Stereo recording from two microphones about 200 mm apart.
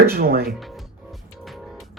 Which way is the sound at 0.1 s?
50° right (ahead or behind).